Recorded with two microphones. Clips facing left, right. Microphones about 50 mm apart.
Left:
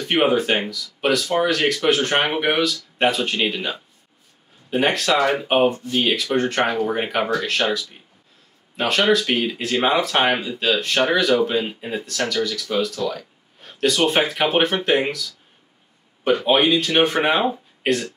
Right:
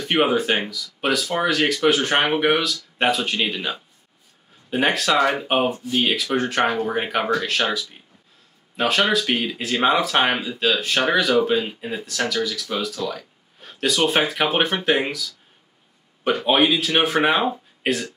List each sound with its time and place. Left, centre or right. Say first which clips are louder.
0.0 s speech: left 1 dB; centre
16.4 s speech: even; centre